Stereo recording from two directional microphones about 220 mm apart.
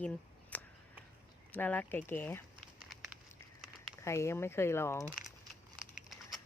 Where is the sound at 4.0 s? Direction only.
10° left (ahead or behind).